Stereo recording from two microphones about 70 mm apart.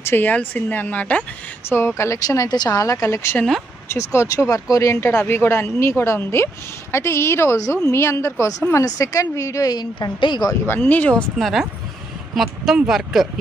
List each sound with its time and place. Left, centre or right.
0.0 s speech: left
1.7 s a woman's voice: left
2.2 s a woman's voice: left
5.3 s a woman's voice: left
9.7 s a woman's voice: left
10.7 s speech: left
11.3 s speech: centre